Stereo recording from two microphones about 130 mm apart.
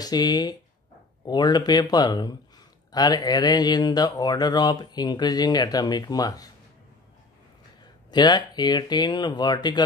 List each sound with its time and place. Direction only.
0.0 s speech: 30° left (ahead or behind)
7.8 s speech: 35° left (ahead or behind)